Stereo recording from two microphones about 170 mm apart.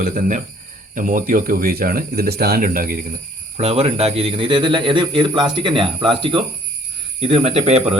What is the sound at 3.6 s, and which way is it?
A man's voice, 35° right (ahead or behind).